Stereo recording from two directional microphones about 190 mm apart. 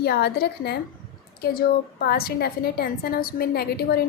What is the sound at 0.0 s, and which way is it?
A woman's voice, 55° left (ahead or behind).